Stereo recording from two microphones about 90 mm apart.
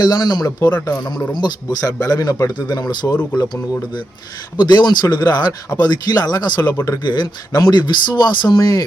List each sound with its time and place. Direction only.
0.0 s speech: 50° left (ahead or behind)